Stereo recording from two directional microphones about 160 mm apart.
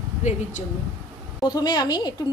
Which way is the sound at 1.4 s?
25° left (ahead or behind).